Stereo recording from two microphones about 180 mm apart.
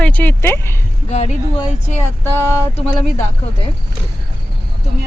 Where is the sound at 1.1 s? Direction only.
35° left (ahead or behind).